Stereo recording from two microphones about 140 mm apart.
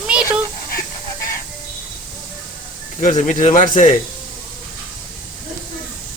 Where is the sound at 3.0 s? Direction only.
65° left (ahead or behind).